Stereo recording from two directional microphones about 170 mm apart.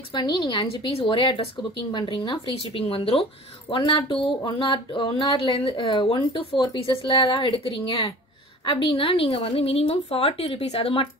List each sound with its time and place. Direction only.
0.1 s a woman's voice: 25° left (ahead or behind)